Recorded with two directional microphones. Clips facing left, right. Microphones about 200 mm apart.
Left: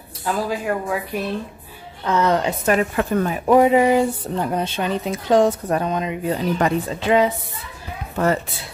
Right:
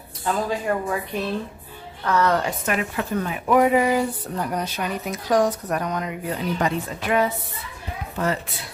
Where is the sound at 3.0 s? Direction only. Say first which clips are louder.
Left 5 dB; 50° left (ahead or behind).